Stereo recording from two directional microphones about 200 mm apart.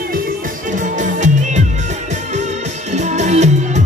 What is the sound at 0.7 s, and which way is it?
Music, 40° right (ahead or behind).